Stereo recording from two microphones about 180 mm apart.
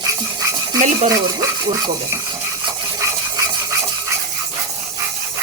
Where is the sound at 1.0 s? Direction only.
20° right (ahead or behind).